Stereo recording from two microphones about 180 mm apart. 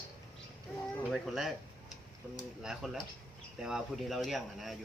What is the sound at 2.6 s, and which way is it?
Speech, centre (ahead or behind).